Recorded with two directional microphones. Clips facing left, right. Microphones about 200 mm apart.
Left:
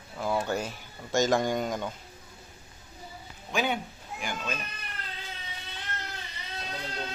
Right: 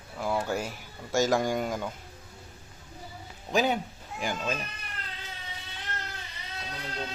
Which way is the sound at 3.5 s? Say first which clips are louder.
Right 3 dB; 35° right (ahead or behind).